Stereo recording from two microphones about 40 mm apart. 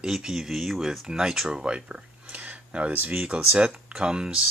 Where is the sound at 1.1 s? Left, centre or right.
Centre.